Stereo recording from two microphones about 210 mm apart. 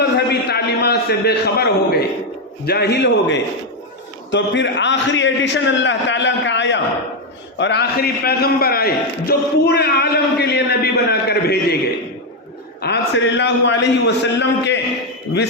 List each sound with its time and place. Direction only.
0.0 s a sound: 50° left (ahead or behind)
2.6 s a man's voice: 50° left (ahead or behind)
12.8 s a man's voice: 55° left (ahead or behind)